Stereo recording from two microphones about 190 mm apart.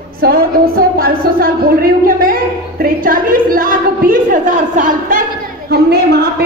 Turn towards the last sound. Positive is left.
turn(degrees=-55)  # may be behind; listen again after turning